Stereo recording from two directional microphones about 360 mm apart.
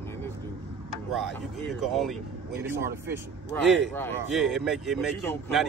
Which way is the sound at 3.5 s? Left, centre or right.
Centre.